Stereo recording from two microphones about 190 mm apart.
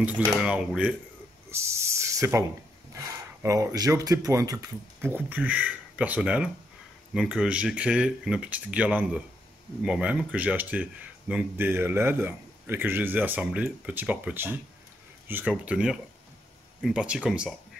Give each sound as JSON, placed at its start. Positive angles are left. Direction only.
{"t": 0.0, "sound": "speech", "side_deg": -10}
{"t": 1.5, "sound": "a sound", "side_deg": -15}
{"t": 3.4, "sound": "speech", "side_deg": -15}